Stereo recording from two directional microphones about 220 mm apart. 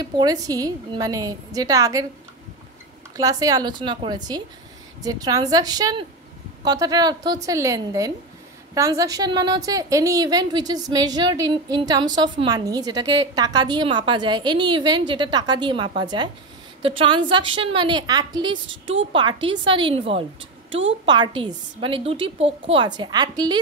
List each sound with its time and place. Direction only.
0.0 s a woman's voice: 20° right (ahead or behind)
3.2 s a woman's voice: 15° right (ahead or behind)